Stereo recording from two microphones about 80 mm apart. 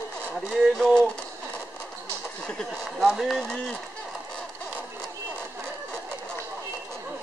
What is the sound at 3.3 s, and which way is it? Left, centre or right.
Speech, centre.